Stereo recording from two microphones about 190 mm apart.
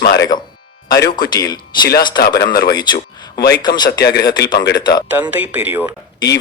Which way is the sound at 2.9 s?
60° left (ahead or behind).